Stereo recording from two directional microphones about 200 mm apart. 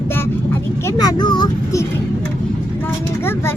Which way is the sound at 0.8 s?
15° left (ahead or behind).